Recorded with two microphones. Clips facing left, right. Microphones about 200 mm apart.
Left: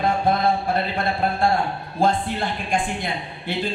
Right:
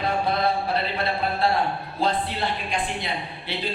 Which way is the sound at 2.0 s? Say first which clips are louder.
Left 4 dB; 50° left (ahead or behind).